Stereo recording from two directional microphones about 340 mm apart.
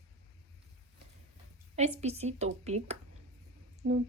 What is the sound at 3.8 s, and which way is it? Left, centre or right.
Speech, right.